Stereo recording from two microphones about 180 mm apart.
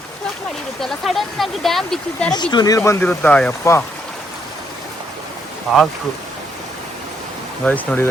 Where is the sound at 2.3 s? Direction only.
25° left (ahead or behind).